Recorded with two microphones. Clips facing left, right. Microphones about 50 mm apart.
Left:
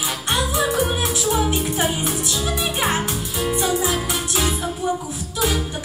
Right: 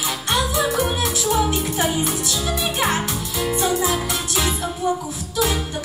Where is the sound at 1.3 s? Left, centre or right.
Centre.